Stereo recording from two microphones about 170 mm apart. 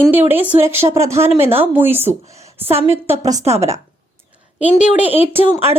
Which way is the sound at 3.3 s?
40° right (ahead or behind).